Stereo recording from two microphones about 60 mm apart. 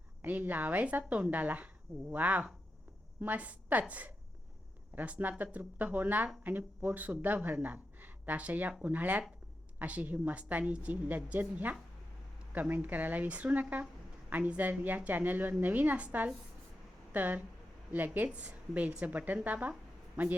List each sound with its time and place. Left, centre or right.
0.2 s a woman's voice: right